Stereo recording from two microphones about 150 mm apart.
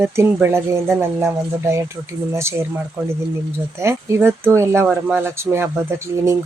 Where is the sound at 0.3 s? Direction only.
15° right (ahead or behind).